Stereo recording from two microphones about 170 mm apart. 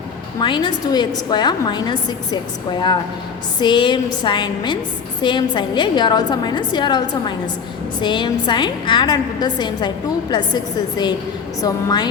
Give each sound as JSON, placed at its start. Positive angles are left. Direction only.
{"t": 0.3, "sound": "a woman's voice", "side_deg": 25}
{"t": 3.6, "sound": "a woman's voice", "side_deg": 25}